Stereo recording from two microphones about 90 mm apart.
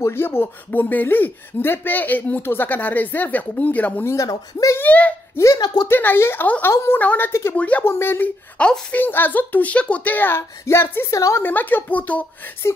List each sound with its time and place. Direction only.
0.0 s speech: 25° left (ahead or behind)
4.1 s speech: 40° left (ahead or behind)
4.7 s a child's voice: 15° left (ahead or behind)
7.0 s a child's voice: 20° left (ahead or behind)
7.8 s speech: 25° left (ahead or behind)
8.5 s a child's voice: 10° left (ahead or behind)
9.0 s speech: 20° left (ahead or behind); by 11.4 s 35° left (ahead or behind)
11.4 s speech: 20° left (ahead or behind)